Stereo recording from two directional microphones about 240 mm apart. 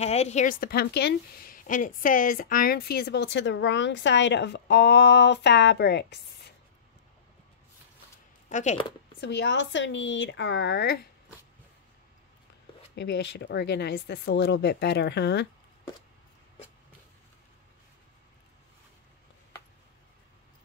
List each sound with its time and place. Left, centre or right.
0.0 s a woman's voice: left
8.5 s speech: left
9.2 s a woman's voice: left
12.9 s a woman's voice: left